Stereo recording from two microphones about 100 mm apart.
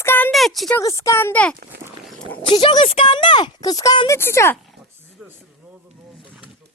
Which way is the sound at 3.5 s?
40° left (ahead or behind).